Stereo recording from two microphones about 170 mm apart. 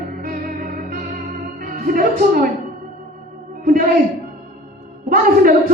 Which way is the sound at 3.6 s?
55° right (ahead or behind).